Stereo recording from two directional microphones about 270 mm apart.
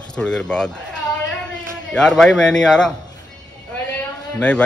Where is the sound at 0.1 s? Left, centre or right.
Centre.